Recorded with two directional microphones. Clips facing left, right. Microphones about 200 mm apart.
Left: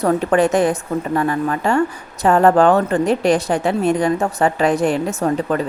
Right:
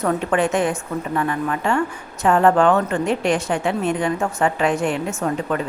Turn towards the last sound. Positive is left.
turn(degrees=35)  # may be behind; listen again after turning